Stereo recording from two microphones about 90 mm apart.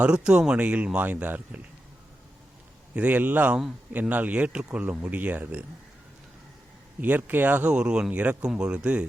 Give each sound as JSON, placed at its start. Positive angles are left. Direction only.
{"t": 0.0, "sound": "a man's voice", "side_deg": -10}
{"t": 2.9, "sound": "a man's voice", "side_deg": -15}
{"t": 7.0, "sound": "a man's voice", "side_deg": -20}